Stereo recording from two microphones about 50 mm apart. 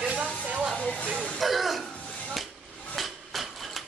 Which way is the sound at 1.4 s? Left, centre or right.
Centre.